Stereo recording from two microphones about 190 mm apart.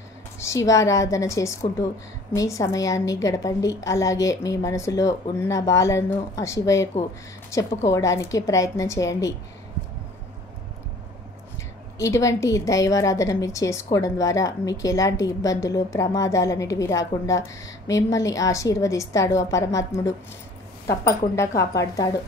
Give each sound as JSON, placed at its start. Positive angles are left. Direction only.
{"t": 0.4, "sound": "a woman's voice", "side_deg": 15}
{"t": 12.0, "sound": "a woman's voice", "side_deg": 15}